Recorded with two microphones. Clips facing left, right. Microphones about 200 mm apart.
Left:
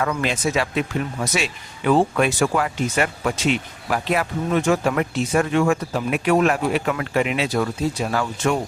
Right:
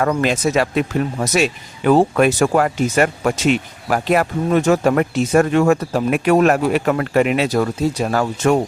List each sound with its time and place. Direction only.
0.0 s speech: 45° right (ahead or behind)